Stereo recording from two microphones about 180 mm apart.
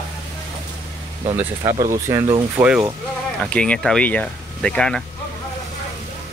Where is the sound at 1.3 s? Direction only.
10° right (ahead or behind).